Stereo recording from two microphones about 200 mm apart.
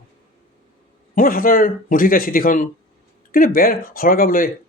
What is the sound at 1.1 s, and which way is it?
Speech, 45° left (ahead or behind).